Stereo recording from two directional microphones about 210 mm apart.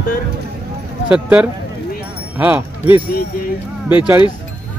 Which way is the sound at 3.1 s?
45° left (ahead or behind).